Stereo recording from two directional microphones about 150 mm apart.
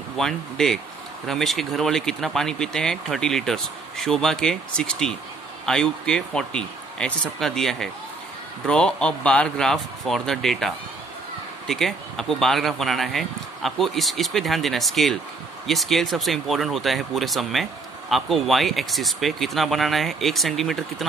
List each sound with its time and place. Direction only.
0.2 s speech: 5° left (ahead or behind)